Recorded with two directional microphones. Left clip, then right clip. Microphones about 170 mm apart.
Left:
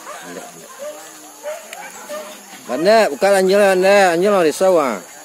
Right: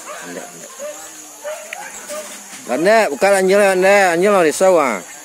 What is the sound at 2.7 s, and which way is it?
Speech, 25° right (ahead or behind).